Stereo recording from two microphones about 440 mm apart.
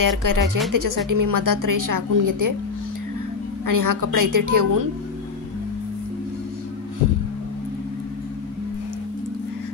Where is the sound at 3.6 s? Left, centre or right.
Right.